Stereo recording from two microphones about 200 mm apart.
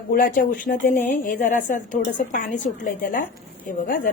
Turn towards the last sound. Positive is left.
turn(degrees=45)  # may be behind; listen again after turning